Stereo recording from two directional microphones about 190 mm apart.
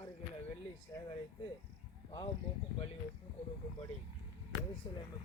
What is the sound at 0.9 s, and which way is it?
Speech, 15° left (ahead or behind).